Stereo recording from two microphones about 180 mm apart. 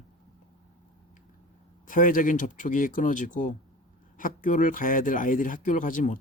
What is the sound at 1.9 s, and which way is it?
Speech, 50° left (ahead or behind).